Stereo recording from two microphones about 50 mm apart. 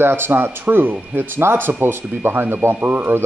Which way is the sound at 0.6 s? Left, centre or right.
Right.